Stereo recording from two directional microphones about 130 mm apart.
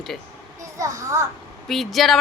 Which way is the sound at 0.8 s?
25° right (ahead or behind).